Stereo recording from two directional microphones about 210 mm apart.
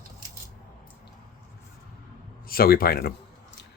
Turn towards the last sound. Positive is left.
turn(degrees=45)  # may be behind; listen again after turning